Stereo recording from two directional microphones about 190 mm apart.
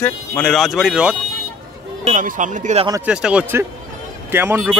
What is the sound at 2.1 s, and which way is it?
Speech, 45° right (ahead or behind).